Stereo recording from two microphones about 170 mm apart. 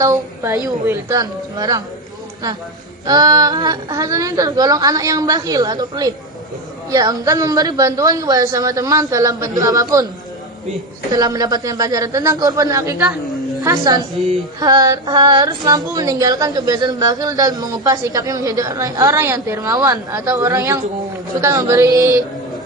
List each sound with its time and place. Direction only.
0.0 s speech: 20° right (ahead or behind)
3.1 s speech: 20° right (ahead or behind)
11.1 s speech: 25° right (ahead or behind)